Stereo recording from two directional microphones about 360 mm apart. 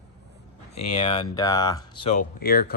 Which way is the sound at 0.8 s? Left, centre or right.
Centre.